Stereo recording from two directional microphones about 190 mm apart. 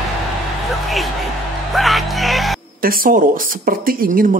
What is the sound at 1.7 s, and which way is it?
Music, centre (ahead or behind).